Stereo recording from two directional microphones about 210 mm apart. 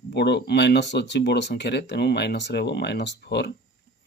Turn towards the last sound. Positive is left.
turn(degrees=55)  # may be behind; listen again after turning